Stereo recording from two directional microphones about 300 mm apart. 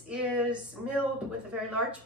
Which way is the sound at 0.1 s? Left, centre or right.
Centre.